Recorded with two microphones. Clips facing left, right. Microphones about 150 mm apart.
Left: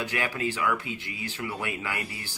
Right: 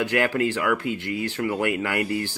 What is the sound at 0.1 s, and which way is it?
Speech, 65° right (ahead or behind).